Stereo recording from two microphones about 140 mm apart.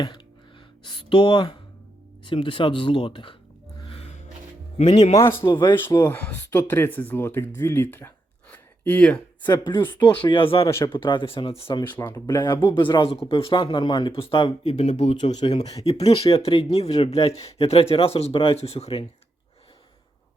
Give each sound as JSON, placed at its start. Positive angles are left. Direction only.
{"t": 0.9, "sound": "speech", "side_deg": 35}
{"t": 3.8, "sound": "music", "side_deg": 45}
{"t": 5.1, "sound": "speech", "side_deg": 20}
{"t": 5.5, "sound": "speech", "side_deg": 35}
{"t": 5.7, "sound": "speech", "side_deg": 20}
{"t": 9.4, "sound": "speech", "side_deg": 35}
{"t": 10.7, "sound": "speech", "side_deg": 20}
{"t": 10.9, "sound": "speech", "side_deg": 35}
{"t": 15.4, "sound": "speech", "side_deg": 40}